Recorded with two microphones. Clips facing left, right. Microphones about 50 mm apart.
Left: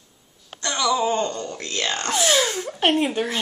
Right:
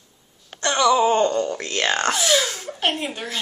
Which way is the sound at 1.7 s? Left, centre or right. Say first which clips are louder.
Right 2 dB; right.